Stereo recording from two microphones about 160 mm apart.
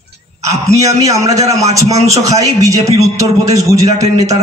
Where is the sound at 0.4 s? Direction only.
20° right (ahead or behind).